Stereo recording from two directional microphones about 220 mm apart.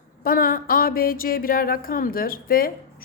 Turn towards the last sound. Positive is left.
turn(degrees=40)  # may be behind; listen again after turning